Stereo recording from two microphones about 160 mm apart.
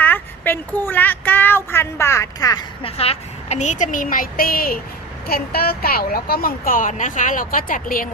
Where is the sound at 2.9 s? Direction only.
40° left (ahead or behind).